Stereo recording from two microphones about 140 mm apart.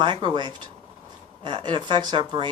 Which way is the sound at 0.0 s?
35° right (ahead or behind).